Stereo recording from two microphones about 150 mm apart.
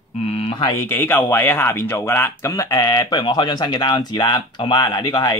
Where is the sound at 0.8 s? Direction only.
15° left (ahead or behind).